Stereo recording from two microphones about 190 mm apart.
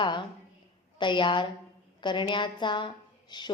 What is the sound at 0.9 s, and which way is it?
A woman's voice, 25° left (ahead or behind).